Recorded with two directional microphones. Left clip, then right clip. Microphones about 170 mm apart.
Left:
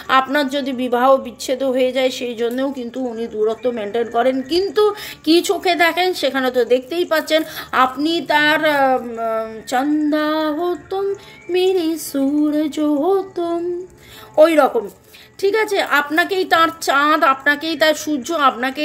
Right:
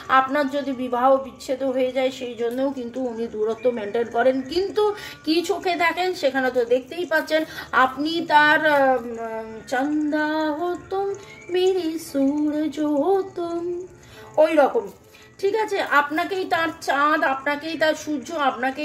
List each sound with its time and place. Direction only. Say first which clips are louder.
0.1 s a woman's voice: left 3 dB; 60° left (ahead or behind); by 2.9 s 45° left (ahead or behind)
3.2 s a woman's voice: left 7 dB; 30° left (ahead or behind)
11.5 s female singing: left 4 dB; 35° left (ahead or behind)
14.3 s a woman's voice: left 5 dB; 45° left (ahead or behind)